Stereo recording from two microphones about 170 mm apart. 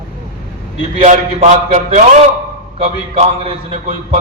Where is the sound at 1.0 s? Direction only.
45° right (ahead or behind).